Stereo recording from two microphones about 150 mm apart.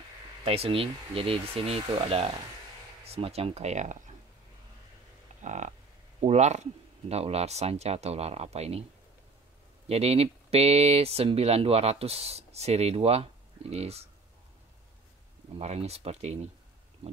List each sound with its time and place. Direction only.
0.5 s speech: 40° right (ahead or behind)
5.4 s speech: 55° right (ahead or behind)
9.8 s speech: 45° right (ahead or behind)
15.5 s speech: 45° right (ahead or behind)